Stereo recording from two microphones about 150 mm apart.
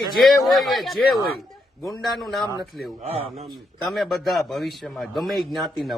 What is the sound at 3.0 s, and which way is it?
Speech, 45° right (ahead or behind).